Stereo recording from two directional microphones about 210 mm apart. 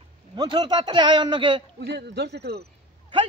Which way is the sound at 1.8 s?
55° right (ahead or behind).